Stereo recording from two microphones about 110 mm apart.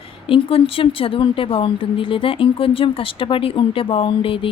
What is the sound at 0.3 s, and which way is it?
Speech, 55° left (ahead or behind).